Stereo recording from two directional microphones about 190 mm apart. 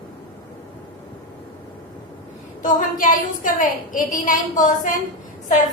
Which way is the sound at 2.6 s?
45° left (ahead or behind).